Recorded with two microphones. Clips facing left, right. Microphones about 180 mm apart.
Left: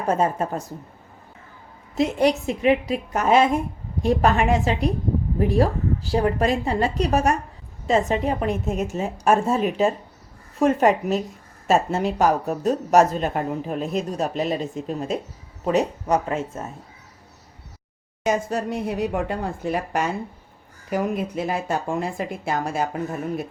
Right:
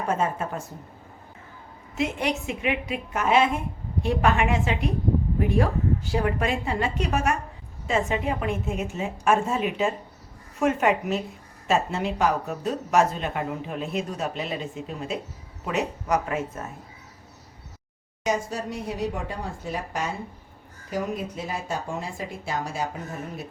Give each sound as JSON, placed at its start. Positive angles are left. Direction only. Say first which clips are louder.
{"t": 0.1, "sound": "speech", "louder": "left 6 dB", "side_deg": 40}
{"t": 2.0, "sound": "speech", "louder": "left 7 dB", "side_deg": 35}
{"t": 18.3, "sound": "speech", "louder": "left 4 dB", "side_deg": 55}